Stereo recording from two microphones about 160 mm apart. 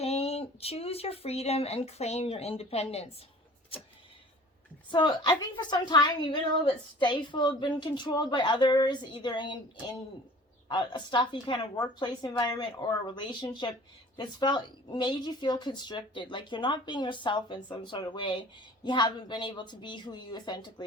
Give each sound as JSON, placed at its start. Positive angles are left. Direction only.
{"t": 0.0, "sound": "speech", "side_deg": 40}
{"t": 4.9, "sound": "a woman's voice", "side_deg": 25}
{"t": 10.7, "sound": "a woman's voice", "side_deg": 30}